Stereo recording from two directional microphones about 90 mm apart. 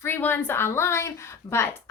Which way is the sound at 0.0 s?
25° left (ahead or behind).